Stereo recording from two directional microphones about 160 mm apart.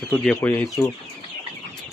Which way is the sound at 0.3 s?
15° left (ahead or behind).